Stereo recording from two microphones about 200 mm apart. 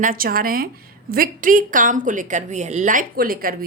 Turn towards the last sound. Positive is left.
turn(degrees=-45)  # may be behind; listen again after turning